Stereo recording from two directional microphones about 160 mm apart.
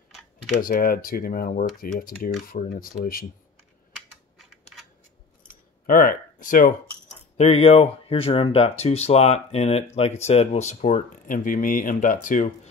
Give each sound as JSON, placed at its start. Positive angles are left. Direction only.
{"t": 0.6, "sound": "speech", "side_deg": 65}
{"t": 3.9, "sound": "typing", "side_deg": 0}
{"t": 5.9, "sound": "speech", "side_deg": 65}
{"t": 7.3, "sound": "speech", "side_deg": 40}